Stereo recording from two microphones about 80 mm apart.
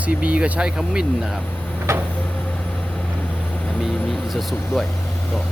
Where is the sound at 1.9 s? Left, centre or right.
Right.